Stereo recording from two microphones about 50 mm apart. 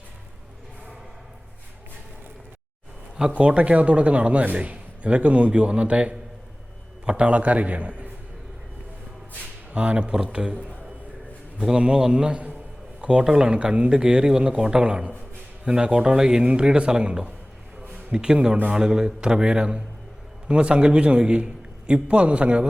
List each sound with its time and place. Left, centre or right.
3.2 s a man's voice: centre
9.7 s a man's voice: right
13.0 s a sound: right
13.2 s a man's voice: centre